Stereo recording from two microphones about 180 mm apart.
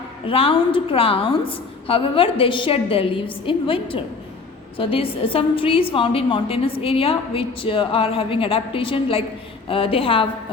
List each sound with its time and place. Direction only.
0.3 s a woman's voice: 30° left (ahead or behind)